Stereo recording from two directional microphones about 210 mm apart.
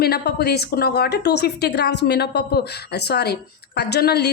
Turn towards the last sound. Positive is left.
turn(degrees=50)  # may be behind; listen again after turning